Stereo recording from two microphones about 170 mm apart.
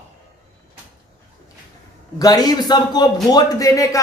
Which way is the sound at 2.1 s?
20° left (ahead or behind).